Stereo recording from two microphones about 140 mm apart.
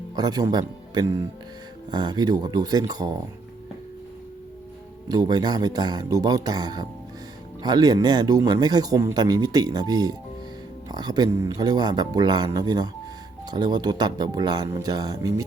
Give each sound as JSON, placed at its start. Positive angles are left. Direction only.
{"t": 0.2, "sound": "speech", "side_deg": -30}
{"t": 5.0, "sound": "speech", "side_deg": -30}